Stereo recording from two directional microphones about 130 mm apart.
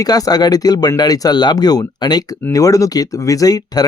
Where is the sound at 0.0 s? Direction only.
30° left (ahead or behind).